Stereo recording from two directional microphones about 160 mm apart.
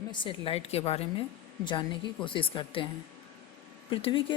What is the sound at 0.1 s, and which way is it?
Speech, 35° left (ahead or behind).